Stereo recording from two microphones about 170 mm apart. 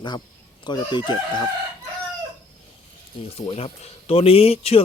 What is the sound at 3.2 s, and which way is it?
Speech, 35° left (ahead or behind).